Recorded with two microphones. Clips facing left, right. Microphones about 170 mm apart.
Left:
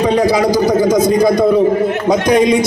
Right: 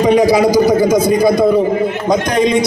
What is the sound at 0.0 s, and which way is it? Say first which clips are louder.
A man's voice: right 2 dB; 15° right (ahead or behind).